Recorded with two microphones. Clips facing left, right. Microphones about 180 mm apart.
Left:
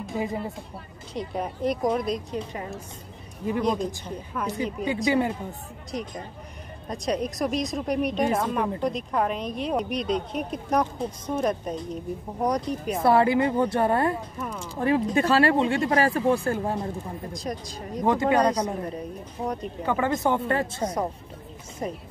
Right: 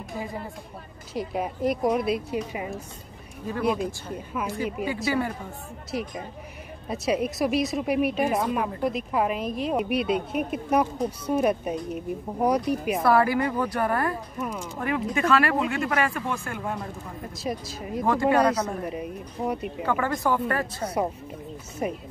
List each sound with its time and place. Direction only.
0.0 s speech: 20° left (ahead or behind)
1.1 s a woman's voice: 5° right (ahead or behind)
4.8 s speech: 20° left (ahead or behind)
5.9 s a woman's voice: 5° right (ahead or behind)
13.0 s speech: 25° left (ahead or behind)
17.3 s a woman's voice: 5° right (ahead or behind)
18.0 s a man's voice: 20° left (ahead or behind)
18.9 s a woman's voice: 10° right (ahead or behind)
19.8 s speech: 20° left (ahead or behind)
21.8 s a woman's voice: 10° right (ahead or behind)